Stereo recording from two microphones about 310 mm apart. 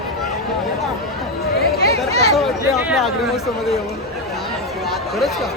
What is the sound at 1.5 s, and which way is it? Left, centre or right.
Chatter, left.